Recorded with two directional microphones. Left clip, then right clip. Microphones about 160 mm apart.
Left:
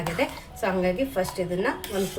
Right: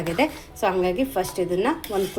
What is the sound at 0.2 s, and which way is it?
Speech, 50° right (ahead or behind).